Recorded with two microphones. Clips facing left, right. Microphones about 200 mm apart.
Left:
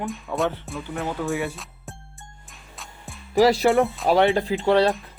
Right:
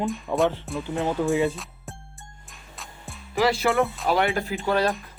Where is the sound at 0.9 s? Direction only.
15° right (ahead or behind).